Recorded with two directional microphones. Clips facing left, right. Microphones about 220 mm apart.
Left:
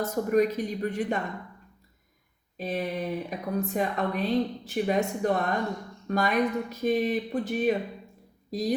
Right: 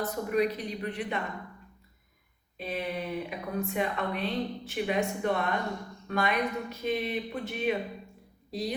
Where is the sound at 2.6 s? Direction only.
40° left (ahead or behind).